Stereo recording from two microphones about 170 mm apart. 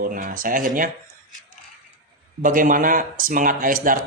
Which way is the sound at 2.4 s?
50° right (ahead or behind).